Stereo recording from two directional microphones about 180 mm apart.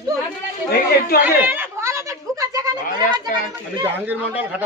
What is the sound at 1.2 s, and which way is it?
Speech, 10° right (ahead or behind).